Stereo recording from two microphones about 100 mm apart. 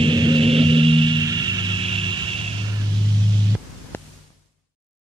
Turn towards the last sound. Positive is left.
turn(degrees=20)  # may be behind; listen again after turning